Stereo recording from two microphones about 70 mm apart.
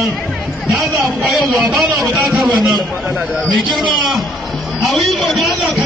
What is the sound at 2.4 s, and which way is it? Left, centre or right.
A man's voice, centre.